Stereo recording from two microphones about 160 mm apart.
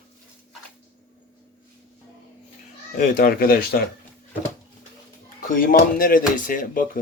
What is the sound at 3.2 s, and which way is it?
Speech, 65° left (ahead or behind).